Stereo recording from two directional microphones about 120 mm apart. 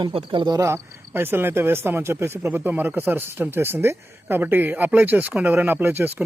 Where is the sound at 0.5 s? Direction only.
25° right (ahead or behind).